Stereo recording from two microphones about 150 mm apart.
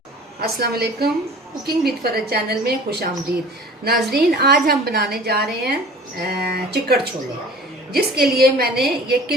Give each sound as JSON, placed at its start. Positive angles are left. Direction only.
{"t": 0.4, "sound": "a woman's voice", "side_deg": -90}